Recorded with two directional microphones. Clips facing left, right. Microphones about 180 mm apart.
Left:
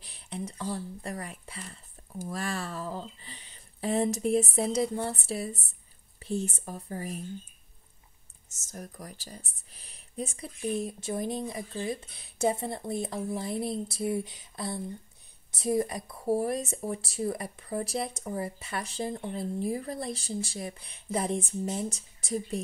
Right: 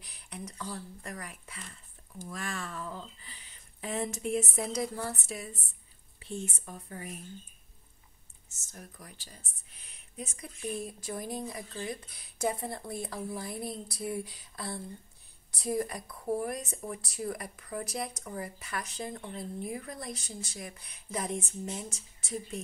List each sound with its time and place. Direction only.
0.0 s speech: 30° left (ahead or behind)
8.5 s speech: 40° left (ahead or behind)